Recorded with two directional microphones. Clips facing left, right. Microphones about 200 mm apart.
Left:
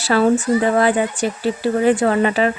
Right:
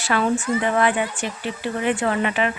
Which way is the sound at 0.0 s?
35° left (ahead or behind).